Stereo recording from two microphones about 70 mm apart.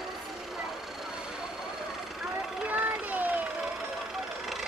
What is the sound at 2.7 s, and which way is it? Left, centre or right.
Vehicle, right.